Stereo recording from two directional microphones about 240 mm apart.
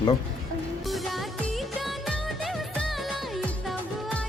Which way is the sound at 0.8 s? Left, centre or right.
Centre.